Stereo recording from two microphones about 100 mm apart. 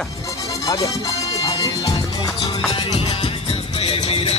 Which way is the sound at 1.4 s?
40° left (ahead or behind).